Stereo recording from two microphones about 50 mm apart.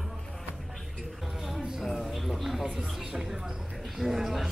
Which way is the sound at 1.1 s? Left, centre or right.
Centre.